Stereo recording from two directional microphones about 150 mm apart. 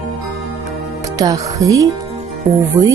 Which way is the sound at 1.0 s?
25° right (ahead or behind).